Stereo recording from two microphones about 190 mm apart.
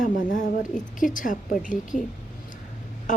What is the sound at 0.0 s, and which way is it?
Speech, 45° left (ahead or behind).